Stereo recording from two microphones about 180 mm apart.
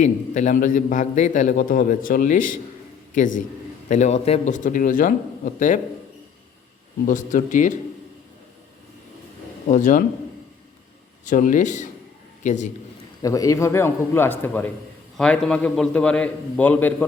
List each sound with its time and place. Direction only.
0.0 s a man's voice: 45° left (ahead or behind)
7.0 s a man's voice: 45° left (ahead or behind)
9.6 s a man's voice: 45° left (ahead or behind)
11.3 s a man's voice: 45° left (ahead or behind)
13.2 s a man's voice: 20° left (ahead or behind)